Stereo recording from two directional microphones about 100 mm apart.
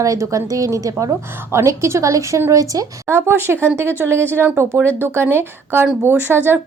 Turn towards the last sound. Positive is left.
turn(degrees=-20)  # may be behind; listen again after turning